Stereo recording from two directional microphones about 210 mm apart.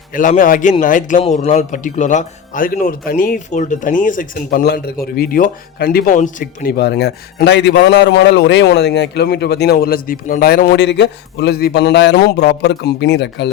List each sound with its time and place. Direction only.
0.1 s a man's voice: 40° left (ahead or behind); by 13.5 s 55° left (ahead or behind)